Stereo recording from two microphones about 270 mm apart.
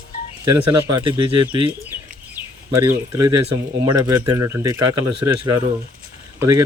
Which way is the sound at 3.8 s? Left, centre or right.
Centre.